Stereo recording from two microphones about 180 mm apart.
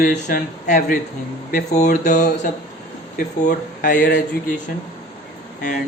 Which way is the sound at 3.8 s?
50° left (ahead or behind).